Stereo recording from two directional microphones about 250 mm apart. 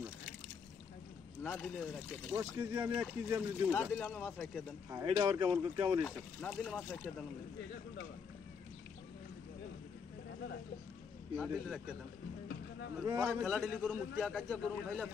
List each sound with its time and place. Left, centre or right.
1.4 s speech: centre
2.3 s speech: centre
4.9 s speech: centre
6.0 s speech: centre
11.3 s speech: centre
13.0 s speech: centre
13.3 s speech: centre